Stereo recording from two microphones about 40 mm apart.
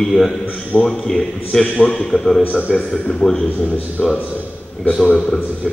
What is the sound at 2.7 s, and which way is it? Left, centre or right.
A man's voice, centre.